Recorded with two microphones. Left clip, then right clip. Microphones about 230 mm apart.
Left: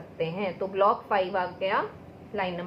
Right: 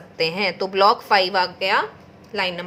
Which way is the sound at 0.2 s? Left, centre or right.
Right.